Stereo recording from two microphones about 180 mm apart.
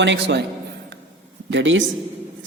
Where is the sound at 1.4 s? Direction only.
90° right.